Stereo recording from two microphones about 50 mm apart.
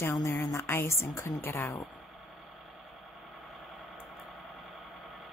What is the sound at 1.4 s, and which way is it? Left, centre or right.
Speech, left.